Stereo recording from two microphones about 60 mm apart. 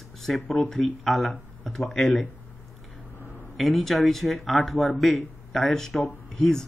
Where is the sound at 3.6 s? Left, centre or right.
Centre.